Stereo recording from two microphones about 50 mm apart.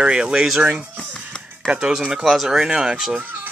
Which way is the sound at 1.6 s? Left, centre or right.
Centre.